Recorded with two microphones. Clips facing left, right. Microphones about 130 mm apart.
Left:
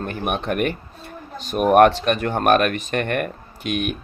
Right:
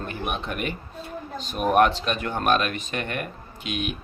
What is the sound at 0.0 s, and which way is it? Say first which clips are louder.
Speech: left 5 dB; 55° left (ahead or behind).